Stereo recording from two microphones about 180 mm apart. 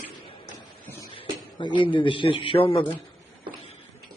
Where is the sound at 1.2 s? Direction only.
25° left (ahead or behind).